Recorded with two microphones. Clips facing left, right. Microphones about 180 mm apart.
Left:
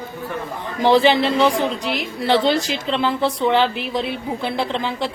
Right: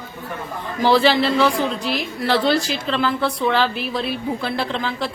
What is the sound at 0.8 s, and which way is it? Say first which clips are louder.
A woman's voice: left 1 dB; 20° left (ahead or behind).